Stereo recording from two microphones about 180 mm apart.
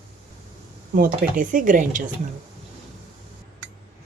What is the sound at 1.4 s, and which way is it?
Speech, 50° right (ahead or behind).